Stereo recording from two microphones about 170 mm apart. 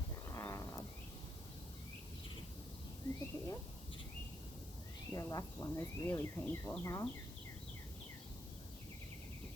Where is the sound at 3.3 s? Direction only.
30° left (ahead or behind).